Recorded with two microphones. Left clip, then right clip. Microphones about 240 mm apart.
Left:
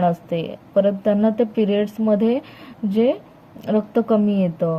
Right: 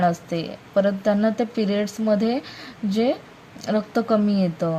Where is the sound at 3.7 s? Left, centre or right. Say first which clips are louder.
Left 2 dB; centre.